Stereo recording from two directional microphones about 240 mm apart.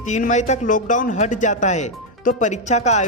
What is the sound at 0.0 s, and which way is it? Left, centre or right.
Speech, left.